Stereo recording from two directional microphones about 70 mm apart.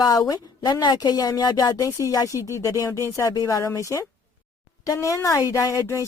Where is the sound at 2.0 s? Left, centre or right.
Left.